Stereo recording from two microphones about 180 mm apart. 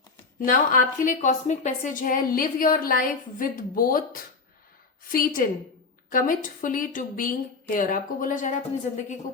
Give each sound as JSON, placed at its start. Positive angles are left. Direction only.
{"t": 0.4, "sound": "a woman's voice", "side_deg": 50}